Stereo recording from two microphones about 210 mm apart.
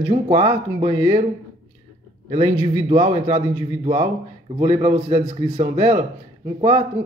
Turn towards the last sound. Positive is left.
turn(degrees=-35)  # may be behind; listen again after turning